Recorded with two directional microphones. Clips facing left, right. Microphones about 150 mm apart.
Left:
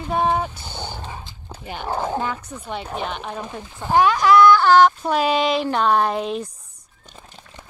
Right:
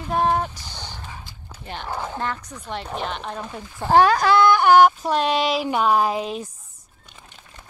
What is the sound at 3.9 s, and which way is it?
Speech, 35° right (ahead or behind).